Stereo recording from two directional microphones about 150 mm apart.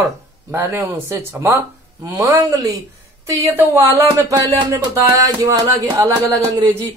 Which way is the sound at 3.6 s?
15° right (ahead or behind).